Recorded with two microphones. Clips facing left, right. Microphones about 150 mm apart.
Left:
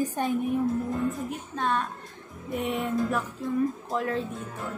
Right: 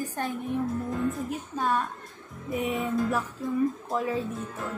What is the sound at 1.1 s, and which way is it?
Speech, 5° right (ahead or behind).